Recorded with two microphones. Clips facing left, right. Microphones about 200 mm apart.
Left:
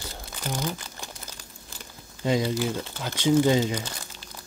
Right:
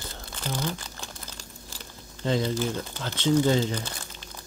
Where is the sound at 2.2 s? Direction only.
10° left (ahead or behind).